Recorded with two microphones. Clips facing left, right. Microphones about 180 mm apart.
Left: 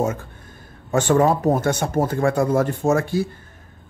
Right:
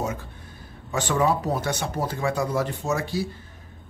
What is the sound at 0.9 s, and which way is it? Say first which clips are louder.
Speech: left 6 dB; 50° left (ahead or behind).